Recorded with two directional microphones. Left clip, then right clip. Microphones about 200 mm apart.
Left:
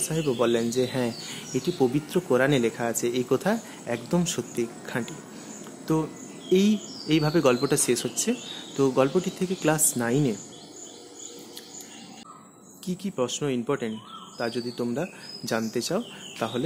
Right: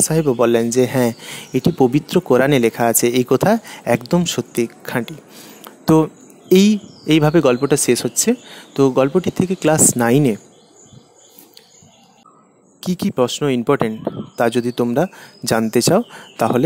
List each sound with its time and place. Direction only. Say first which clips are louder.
0.0 s speech: right 10 dB; 45° right (ahead or behind)
5.6 s a sound: right 13 dB; 45° right (ahead or behind)
6.5 s speech: right 9 dB; 45° right (ahead or behind)
12.8 s speech: right 11 dB; 45° right (ahead or behind)